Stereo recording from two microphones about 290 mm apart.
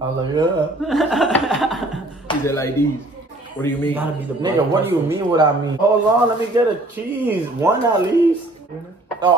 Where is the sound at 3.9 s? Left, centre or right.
Centre.